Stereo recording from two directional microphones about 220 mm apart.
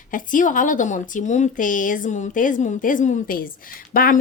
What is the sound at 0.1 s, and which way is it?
Speech, 35° left (ahead or behind).